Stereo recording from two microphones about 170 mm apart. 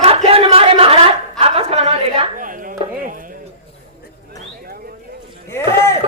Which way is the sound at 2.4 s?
55° right (ahead or behind).